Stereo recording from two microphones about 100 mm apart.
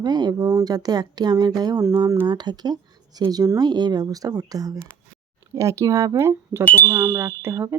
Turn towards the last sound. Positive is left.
turn(degrees=-25)  # may be behind; listen again after turning